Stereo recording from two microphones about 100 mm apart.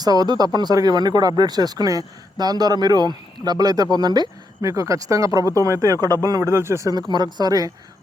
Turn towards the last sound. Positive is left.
turn(degrees=-40)  # may be behind; listen again after turning